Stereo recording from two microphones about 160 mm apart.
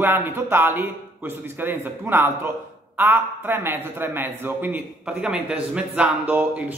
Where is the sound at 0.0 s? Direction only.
15° right (ahead or behind).